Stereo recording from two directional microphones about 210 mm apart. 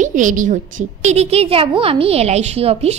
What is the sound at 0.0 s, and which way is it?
A woman's voice, 35° right (ahead or behind).